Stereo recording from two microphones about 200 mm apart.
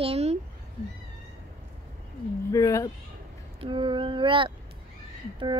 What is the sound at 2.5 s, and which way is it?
Speech, 15° left (ahead or behind).